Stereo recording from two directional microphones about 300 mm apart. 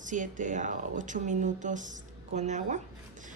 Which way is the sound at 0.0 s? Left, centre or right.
Right.